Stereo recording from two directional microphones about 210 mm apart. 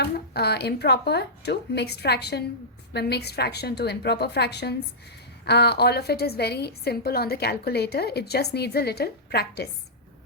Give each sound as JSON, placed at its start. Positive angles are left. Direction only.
{"t": 0.0, "sound": "a woman's voice", "side_deg": 50}